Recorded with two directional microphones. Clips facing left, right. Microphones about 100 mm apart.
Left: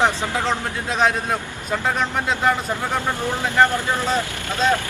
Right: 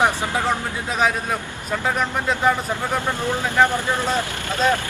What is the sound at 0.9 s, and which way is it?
Speech, 5° right (ahead or behind).